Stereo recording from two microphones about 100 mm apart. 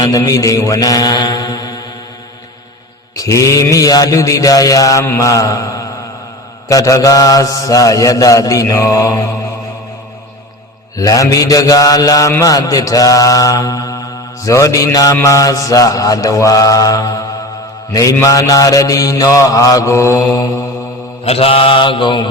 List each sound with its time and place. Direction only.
0.0 s mantra: 35° left (ahead or behind)
3.2 s mantra: 30° left (ahead or behind)
10.9 s mantra: 35° left (ahead or behind)
21.2 s mantra: 75° left (ahead or behind); by 22.3 s 50° left (ahead or behind)